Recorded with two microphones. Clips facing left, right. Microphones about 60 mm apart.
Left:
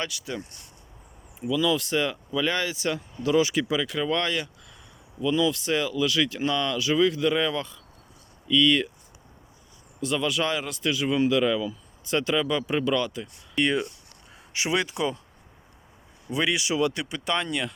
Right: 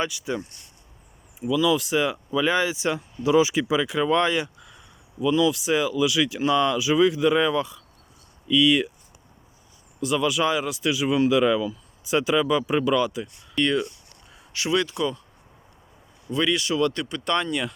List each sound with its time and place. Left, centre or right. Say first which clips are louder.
0.0 s speech: right 5 dB; centre
1.4 s speech: right 3 dB; centre
5.2 s speech: right 3 dB; centre
10.0 s speech: right 3 dB; centre
13.6 s speech: right 2 dB; centre
16.3 s speech: right 2 dB; centre